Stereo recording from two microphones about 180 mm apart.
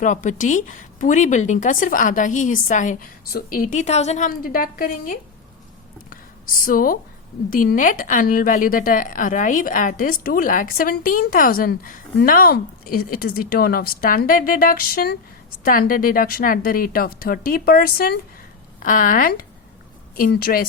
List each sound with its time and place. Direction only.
0.0 s speech: 45° left (ahead or behind)
4.3 s speech: 55° left (ahead or behind)
6.1 s a sound: 50° left (ahead or behind)
7.5 s a woman's voice: 50° left (ahead or behind)